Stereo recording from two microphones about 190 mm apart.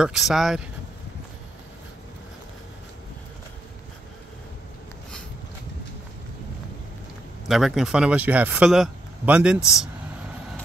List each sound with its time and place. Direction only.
0.0 s speech: centre (ahead or behind)
7.4 s speech: centre (ahead or behind)